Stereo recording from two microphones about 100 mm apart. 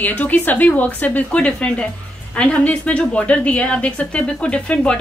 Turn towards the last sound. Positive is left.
turn(degrees=10)  # may be behind; listen again after turning